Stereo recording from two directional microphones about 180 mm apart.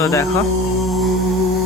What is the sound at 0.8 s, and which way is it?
Music, centre (ahead or behind).